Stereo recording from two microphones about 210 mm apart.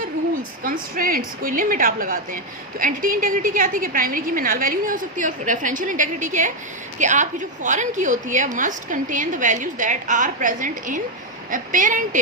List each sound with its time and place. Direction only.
0.6 s a woman's voice: 40° right (ahead or behind)